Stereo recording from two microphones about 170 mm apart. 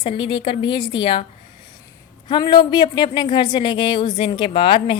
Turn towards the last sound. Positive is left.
turn(degrees=30)  # may be behind; listen again after turning